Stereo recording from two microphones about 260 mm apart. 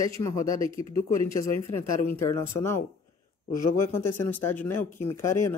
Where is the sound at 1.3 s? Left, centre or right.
Left.